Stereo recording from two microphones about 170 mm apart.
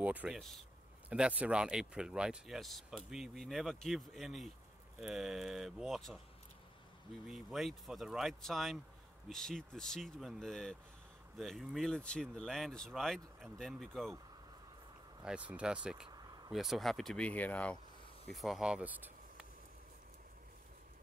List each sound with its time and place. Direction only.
0.0 s speech: 10° right (ahead or behind)
7.2 s speech: centre (ahead or behind)
15.2 s speech: 5° right (ahead or behind)
16.1 s a sound: 25° right (ahead or behind)
16.5 s speech: centre (ahead or behind)